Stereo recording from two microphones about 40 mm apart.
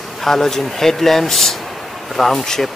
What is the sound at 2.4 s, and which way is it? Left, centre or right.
Speech, centre.